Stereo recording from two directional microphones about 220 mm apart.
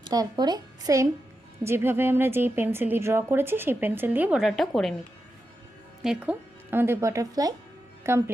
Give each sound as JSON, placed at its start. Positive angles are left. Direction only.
{"t": 0.0, "sound": "a woman's voice", "side_deg": -20}
{"t": 6.0, "sound": "a woman's voice", "side_deg": -5}